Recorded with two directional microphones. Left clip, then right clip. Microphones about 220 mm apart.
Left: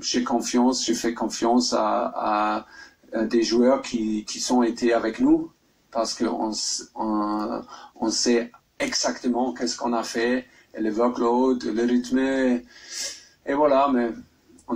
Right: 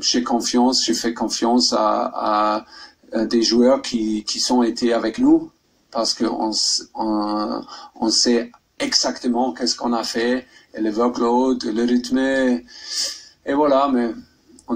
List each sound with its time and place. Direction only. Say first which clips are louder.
0.0 s speech: right 5 dB; 35° right (ahead or behind)